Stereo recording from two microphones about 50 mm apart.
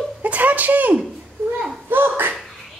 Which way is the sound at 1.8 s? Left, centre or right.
Right.